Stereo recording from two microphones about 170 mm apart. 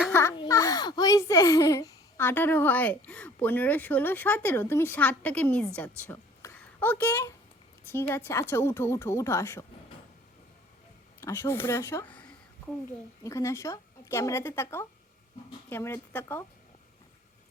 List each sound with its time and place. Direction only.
0.1 s a sound: 15° left (ahead or behind)
0.3 s a child's voice: 20° left (ahead or behind)
6.1 s a sound: 15° left (ahead or behind)
8.1 s a child's voice: 15° left (ahead or behind)
11.2 s a child's voice: 15° left (ahead or behind)
13.2 s a child's voice: 20° left (ahead or behind)